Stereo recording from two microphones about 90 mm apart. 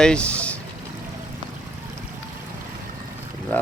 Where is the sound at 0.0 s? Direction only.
10° left (ahead or behind).